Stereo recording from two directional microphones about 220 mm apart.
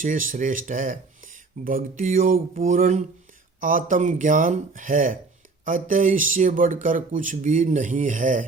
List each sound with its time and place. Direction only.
0.0 s speech: 35° right (ahead or behind)